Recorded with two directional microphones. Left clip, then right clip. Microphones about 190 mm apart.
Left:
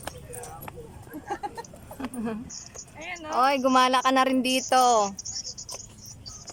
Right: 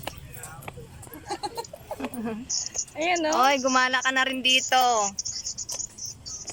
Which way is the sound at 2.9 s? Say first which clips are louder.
Right 11 dB; 60° right (ahead or behind).